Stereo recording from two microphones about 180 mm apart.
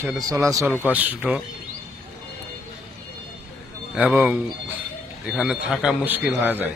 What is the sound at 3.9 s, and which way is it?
A man's voice, 10° right (ahead or behind).